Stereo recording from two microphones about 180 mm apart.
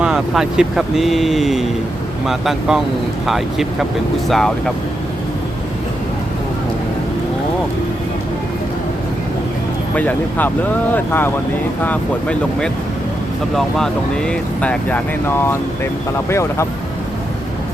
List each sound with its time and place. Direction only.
0.0 s speech: 5° right (ahead or behind)
9.9 s speech: 10° left (ahead or behind)